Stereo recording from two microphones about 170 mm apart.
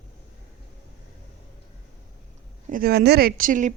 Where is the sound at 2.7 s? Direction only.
60° right (ahead or behind).